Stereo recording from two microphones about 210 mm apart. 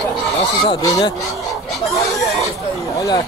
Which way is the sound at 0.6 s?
15° left (ahead or behind).